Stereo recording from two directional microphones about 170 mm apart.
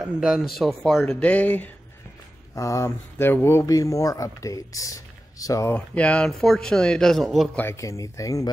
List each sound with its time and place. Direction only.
0.0 s speech: 5° right (ahead or behind); by 5.8 s 20° left (ahead or behind)
5.8 s speech: 5° left (ahead or behind)
7.6 s speech: 15° left (ahead or behind)